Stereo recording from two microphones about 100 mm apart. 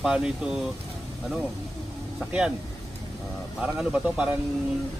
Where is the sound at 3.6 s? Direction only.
10° right (ahead or behind).